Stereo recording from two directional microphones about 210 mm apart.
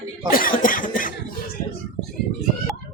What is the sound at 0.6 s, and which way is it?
Cough, 40° left (ahead or behind).